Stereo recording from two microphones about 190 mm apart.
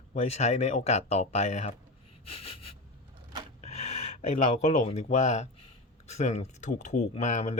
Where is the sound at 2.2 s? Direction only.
30° left (ahead or behind).